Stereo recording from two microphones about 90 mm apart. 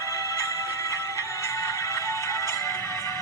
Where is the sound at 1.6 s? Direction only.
35° left (ahead or behind).